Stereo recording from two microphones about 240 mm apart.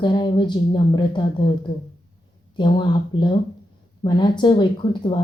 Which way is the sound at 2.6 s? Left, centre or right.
Centre.